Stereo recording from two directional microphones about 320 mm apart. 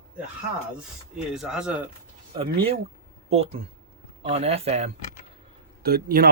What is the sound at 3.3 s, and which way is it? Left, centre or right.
Speech, centre.